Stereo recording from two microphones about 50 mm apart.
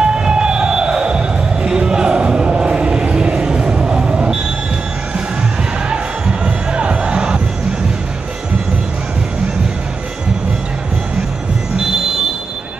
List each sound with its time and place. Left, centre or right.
0.0 s emergency vehicle: centre
5.9 s music: centre